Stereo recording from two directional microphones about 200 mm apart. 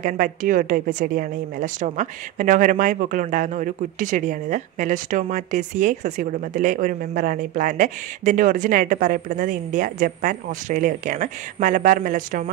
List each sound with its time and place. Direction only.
0.0 s a woman's voice: 45° right (ahead or behind)